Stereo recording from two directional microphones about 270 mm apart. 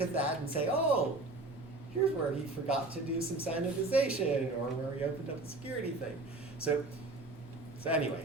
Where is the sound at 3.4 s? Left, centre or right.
Centre.